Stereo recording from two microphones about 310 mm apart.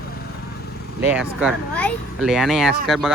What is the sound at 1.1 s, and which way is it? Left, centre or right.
Speech, centre.